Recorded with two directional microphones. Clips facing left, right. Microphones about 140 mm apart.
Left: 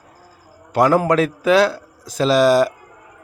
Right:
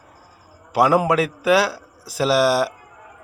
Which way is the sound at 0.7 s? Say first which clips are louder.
Left 2 dB; 5° right (ahead or behind).